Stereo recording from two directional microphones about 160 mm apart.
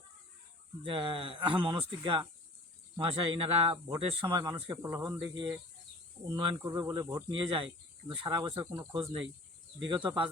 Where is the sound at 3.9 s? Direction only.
25° right (ahead or behind).